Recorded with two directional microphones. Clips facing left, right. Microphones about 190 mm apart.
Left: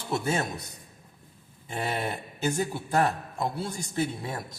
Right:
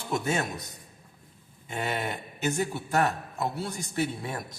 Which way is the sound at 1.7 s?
30° left (ahead or behind).